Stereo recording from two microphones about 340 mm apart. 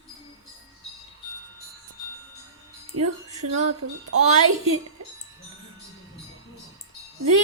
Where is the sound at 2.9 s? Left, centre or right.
Right.